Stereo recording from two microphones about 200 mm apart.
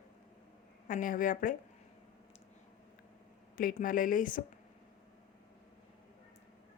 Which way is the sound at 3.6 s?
45° left (ahead or behind).